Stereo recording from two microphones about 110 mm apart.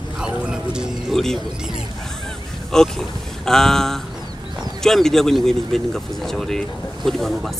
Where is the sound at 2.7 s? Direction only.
5° left (ahead or behind).